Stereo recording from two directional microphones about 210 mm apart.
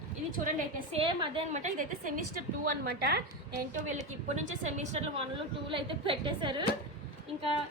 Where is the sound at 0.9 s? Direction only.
25° right (ahead or behind); by 3.2 s 50° right (ahead or behind).